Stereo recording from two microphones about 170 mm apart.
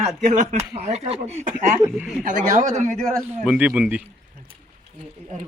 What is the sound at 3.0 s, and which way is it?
A man's voice, centre (ahead or behind).